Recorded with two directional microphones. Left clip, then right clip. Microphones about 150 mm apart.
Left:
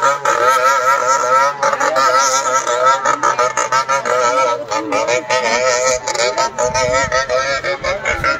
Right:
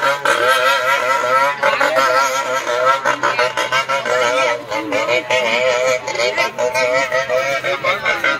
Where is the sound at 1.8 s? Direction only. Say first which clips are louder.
Left 3 dB; 25° left (ahead or behind).